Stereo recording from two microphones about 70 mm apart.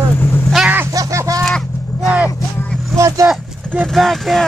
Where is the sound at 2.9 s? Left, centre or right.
Right.